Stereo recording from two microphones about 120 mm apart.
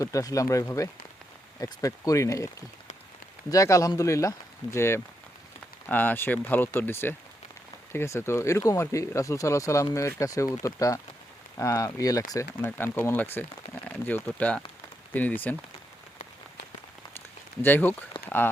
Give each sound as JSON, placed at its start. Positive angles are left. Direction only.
{"t": 0.0, "sound": "speech", "side_deg": 30}
{"t": 12.6, "sound": "speech", "side_deg": 15}
{"t": 17.6, "sound": "speech", "side_deg": 15}
{"t": 18.1, "sound": "a sound", "side_deg": 45}